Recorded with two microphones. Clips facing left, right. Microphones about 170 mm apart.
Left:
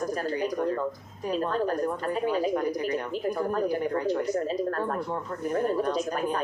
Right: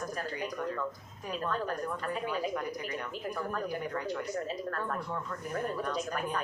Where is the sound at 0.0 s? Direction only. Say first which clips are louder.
Left 8 dB; 35° left (ahead or behind).